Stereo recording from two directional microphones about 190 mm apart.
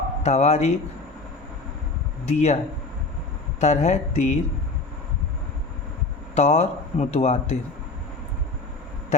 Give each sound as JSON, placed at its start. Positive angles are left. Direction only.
{"t": 0.2, "sound": "speech", "side_deg": 35}
{"t": 2.2, "sound": "speech", "side_deg": 35}
{"t": 3.6, "sound": "speech", "side_deg": 35}
{"t": 6.3, "sound": "speech", "side_deg": 35}